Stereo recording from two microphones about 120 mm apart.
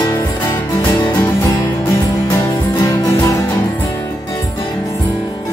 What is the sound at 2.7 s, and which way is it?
Music, 30° left (ahead or behind).